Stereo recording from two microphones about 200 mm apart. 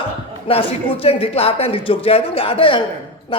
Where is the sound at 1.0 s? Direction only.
30° left (ahead or behind).